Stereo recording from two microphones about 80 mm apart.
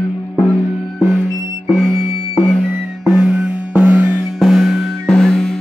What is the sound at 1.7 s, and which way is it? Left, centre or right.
Music, centre.